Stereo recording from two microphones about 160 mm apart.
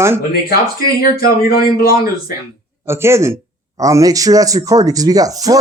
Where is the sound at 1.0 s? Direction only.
65° left (ahead or behind).